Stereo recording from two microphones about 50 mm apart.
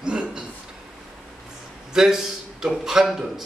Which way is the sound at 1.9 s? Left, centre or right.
Centre.